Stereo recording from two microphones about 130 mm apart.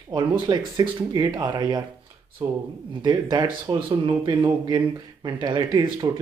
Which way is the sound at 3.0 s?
35° right (ahead or behind).